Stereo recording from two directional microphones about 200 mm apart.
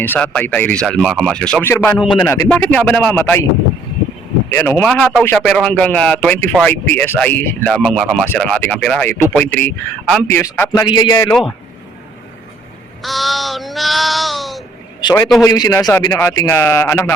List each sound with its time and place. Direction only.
0.0 s a man's voice: 10° left (ahead or behind)
4.5 s a man's voice: 10° left (ahead or behind)
11.3 s speech: 5° left (ahead or behind)
13.0 s speech: centre (ahead or behind)
15.0 s a man's voice: 20° left (ahead or behind)